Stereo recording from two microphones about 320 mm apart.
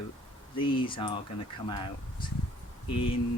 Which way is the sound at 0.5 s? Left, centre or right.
Centre.